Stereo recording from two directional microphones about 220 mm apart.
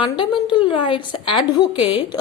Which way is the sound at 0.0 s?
20° left (ahead or behind).